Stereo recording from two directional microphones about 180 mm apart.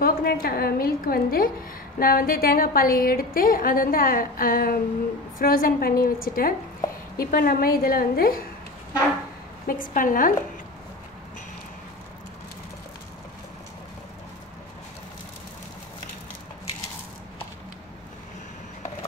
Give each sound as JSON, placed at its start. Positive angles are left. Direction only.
{"t": 0.0, "sound": "a woman's voice", "side_deg": 55}
{"t": 9.7, "sound": "a woman's voice", "side_deg": 50}